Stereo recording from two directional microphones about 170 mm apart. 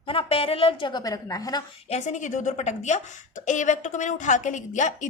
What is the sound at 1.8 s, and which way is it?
A woman's voice, 40° left (ahead or behind).